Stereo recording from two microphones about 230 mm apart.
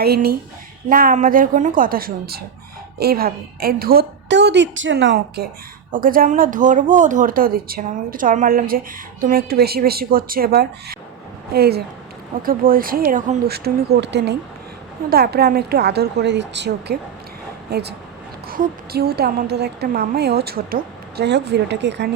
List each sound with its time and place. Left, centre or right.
0.0 s a woman's voice: right